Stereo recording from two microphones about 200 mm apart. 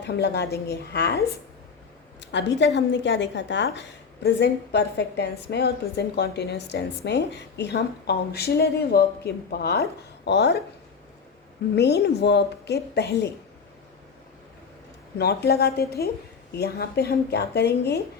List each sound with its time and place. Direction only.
0.0 s a woman's voice: 55° left (ahead or behind)
2.2 s a sound: 60° left (ahead or behind)
2.6 s a woman's voice: 60° left (ahead or behind)
11.7 s a woman's voice: 55° left (ahead or behind)
15.2 s speech: 55° left (ahead or behind)